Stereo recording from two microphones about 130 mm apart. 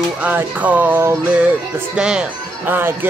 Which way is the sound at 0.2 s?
10° right (ahead or behind).